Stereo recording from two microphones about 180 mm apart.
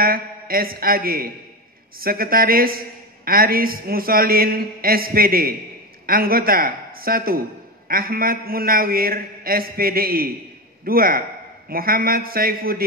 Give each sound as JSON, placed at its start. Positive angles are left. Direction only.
{"t": 0.0, "sound": "a man's voice", "side_deg": -55}